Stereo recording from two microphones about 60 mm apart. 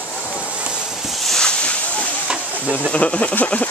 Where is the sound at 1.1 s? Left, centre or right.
Centre.